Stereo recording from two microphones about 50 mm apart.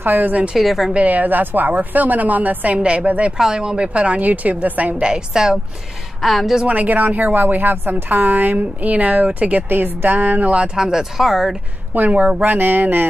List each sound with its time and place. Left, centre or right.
0.0 s a woman's voice: right
0.6 s a woman's voice: centre
0.9 s a woman's voice: right
2.8 s a woman's voice: right
3.3 s a woman's voice: centre; by 5.0 s right
5.0 s speech: centre
6.2 s a woman's voice: centre
6.7 s a woman's voice: right
10.6 s speech: centre
11.9 s a woman's voice: right
12.5 s speech: right